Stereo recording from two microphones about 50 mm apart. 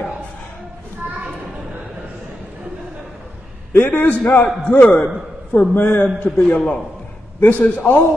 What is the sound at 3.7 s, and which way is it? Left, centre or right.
Speech, left.